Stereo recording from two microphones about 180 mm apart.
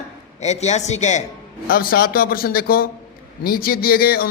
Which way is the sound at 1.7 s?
55° left (ahead or behind).